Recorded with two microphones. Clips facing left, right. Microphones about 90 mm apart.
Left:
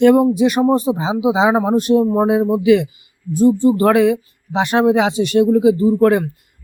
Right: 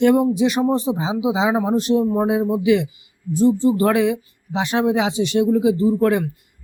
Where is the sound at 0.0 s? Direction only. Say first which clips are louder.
Left 4 dB; 55° left (ahead or behind).